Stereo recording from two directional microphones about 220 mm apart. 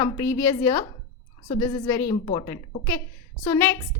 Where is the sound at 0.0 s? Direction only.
15° left (ahead or behind).